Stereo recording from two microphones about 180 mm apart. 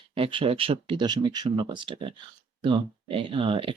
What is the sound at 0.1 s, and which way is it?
Speech, 30° right (ahead or behind).